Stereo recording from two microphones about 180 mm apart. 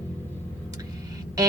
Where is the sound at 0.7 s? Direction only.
20° right (ahead or behind).